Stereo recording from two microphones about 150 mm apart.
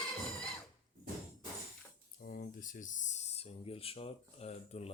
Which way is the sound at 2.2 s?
80° left.